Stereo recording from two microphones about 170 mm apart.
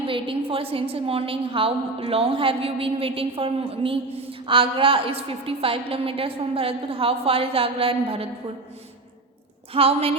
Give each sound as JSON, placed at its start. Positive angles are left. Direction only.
{"t": 0.0, "sound": "a woman's voice", "side_deg": -30}
{"t": 9.7, "sound": "a woman's voice", "side_deg": -35}